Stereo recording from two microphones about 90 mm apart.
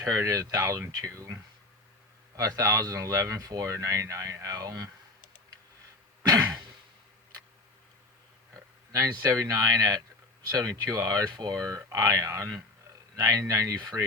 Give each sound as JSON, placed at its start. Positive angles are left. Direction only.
{"t": 0.0, "sound": "speech", "side_deg": -35}
{"t": 6.2, "sound": "throat clearing", "side_deg": -40}
{"t": 8.5, "sound": "speech", "side_deg": -40}